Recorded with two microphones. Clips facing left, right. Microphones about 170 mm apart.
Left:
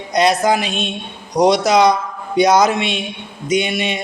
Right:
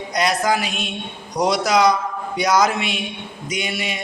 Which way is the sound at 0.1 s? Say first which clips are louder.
Left 5 dB; 25° left (ahead or behind).